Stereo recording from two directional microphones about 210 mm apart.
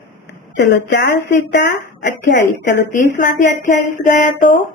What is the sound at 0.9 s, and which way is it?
Speech, 55° left (ahead or behind).